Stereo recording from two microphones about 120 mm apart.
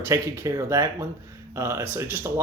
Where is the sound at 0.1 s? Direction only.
25° right (ahead or behind).